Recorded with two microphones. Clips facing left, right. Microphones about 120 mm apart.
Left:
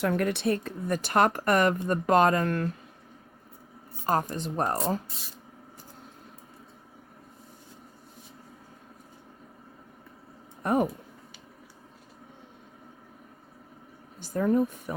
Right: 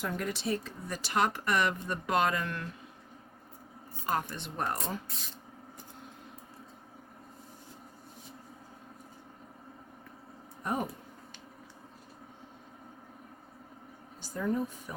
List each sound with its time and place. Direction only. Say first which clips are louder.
0.0 s speech: left 8 dB; 65° left (ahead or behind); by 2.7 s 45° left (ahead or behind)
4.0 s speech: left 6 dB; 40° left (ahead or behind)
10.6 s speech: left 8 dB; 60° left (ahead or behind)
14.2 s speech: left 7 dB; 55° left (ahead or behind)